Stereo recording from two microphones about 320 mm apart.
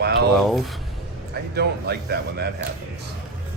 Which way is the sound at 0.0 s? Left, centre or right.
Right.